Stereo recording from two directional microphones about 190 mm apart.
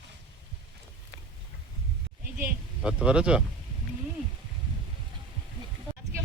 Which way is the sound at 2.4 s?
5° right (ahead or behind).